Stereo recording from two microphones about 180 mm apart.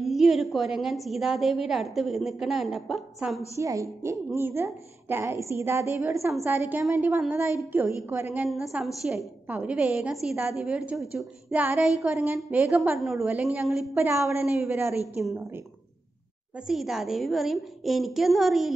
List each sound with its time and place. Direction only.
0.0 s a woman's voice: centre (ahead or behind)
3.5 s a woman's voice: 15° right (ahead or behind)
8.5 s a woman's voice: centre (ahead or behind)
13.9 s a woman's voice: 15° right (ahead or behind)
16.5 s a woman's voice: 5° right (ahead or behind)